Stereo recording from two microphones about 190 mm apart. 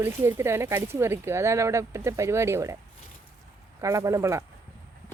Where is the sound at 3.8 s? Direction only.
15° right (ahead or behind).